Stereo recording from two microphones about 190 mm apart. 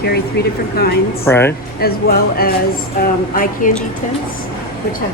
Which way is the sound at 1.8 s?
55° left (ahead or behind).